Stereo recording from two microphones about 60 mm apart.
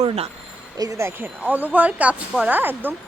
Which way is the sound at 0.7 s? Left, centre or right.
Right.